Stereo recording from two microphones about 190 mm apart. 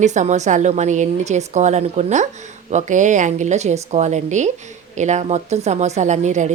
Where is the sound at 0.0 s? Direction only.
40° right (ahead or behind).